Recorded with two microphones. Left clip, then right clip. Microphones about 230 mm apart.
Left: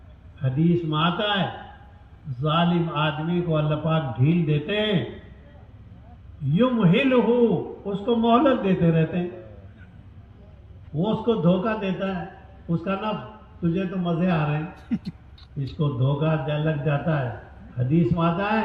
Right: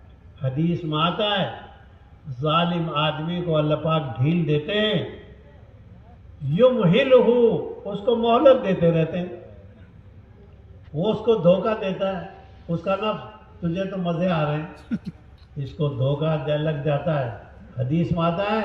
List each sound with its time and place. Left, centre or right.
0.4 s a man's voice: right
6.5 s a man's voice: right
11.0 s a man's voice: right
14.8 s speech: centre
15.8 s a man's voice: right